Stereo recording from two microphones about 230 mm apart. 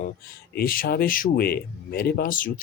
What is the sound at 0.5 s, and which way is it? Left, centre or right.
Speech, left.